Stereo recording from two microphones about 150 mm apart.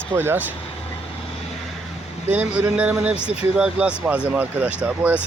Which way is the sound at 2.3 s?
10° right (ahead or behind).